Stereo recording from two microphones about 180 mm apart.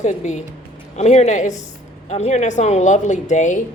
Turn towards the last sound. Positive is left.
turn(degrees=45)  # may be behind; listen again after turning